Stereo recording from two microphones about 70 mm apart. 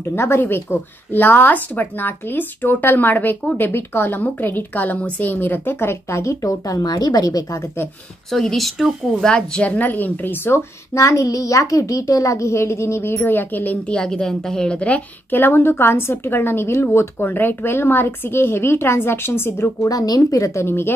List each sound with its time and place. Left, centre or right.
0.1 s a woman's voice: left
8.3 s speech: centre
9.3 s speech: centre
11.0 s a child's voice: left
13.2 s speech: left
13.9 s a woman's voice: centre
15.3 s a woman's voice: left
19.9 s a child's voice: left
20.6 s a woman's voice: left